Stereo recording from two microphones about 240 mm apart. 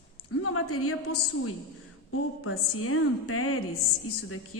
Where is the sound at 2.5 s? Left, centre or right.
Left.